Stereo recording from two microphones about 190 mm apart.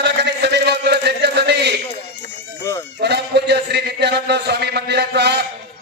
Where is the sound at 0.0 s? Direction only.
65° right (ahead or behind).